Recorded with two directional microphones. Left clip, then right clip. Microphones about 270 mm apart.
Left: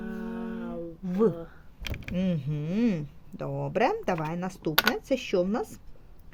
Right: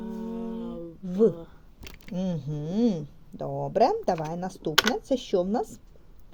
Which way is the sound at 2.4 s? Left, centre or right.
Left.